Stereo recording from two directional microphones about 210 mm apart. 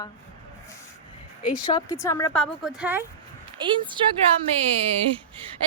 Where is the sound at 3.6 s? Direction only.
20° right (ahead or behind).